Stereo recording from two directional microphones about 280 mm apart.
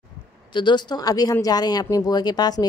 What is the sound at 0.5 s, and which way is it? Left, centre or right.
Speech, centre.